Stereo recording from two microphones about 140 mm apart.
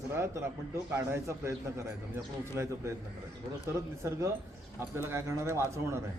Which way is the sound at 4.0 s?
20° right (ahead or behind).